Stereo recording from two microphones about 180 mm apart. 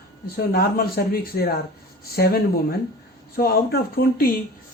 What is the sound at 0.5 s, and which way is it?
Speech, 55° left (ahead or behind).